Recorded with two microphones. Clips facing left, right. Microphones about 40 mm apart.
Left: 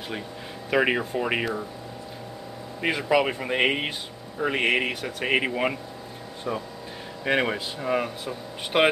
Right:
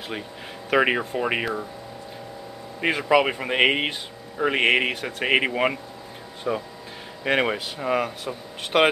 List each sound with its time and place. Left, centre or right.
0.7 s speech: centre
2.8 s speech: centre